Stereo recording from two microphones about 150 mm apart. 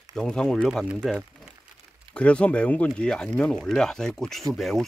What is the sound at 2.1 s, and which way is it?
Speech, 10° left (ahead or behind).